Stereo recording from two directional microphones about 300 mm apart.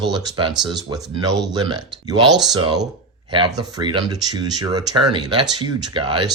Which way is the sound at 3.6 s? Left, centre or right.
Centre.